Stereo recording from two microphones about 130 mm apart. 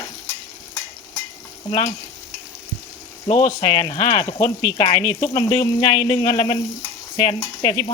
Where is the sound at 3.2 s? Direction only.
40° left (ahead or behind).